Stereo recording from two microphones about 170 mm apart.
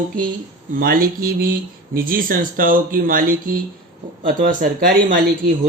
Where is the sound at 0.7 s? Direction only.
55° right (ahead or behind).